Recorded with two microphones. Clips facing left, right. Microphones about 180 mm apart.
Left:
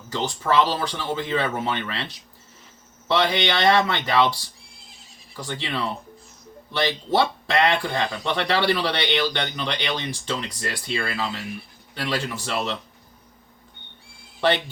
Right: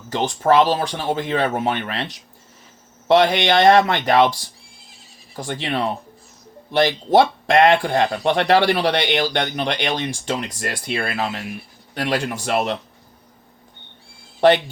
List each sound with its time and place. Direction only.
0.1 s speech: 60° right (ahead or behind)
0.6 s speech: 50° right (ahead or behind)
5.4 s speech: 50° right (ahead or behind)
10.9 s speech: 60° right (ahead or behind)
11.9 s speech: 50° right (ahead or behind)